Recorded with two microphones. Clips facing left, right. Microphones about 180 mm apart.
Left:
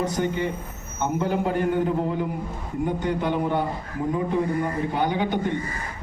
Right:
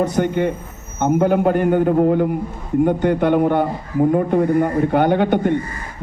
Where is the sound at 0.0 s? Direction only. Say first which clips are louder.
Right 7 dB; 60° right (ahead or behind).